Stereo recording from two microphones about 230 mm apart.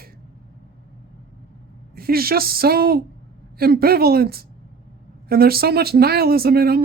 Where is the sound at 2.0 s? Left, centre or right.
Right.